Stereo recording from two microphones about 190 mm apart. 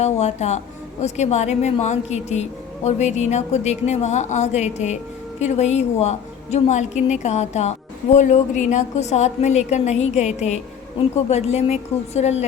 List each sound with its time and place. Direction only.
0.0 s a woman's voice: 35° left (ahead or behind)